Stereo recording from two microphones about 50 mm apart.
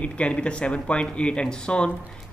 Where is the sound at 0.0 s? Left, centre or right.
Left.